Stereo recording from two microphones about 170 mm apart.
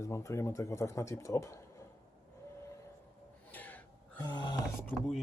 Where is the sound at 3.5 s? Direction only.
10° left (ahead or behind).